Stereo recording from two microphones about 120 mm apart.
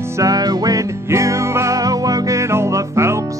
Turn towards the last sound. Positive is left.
turn(degrees=-25)  # may be behind; listen again after turning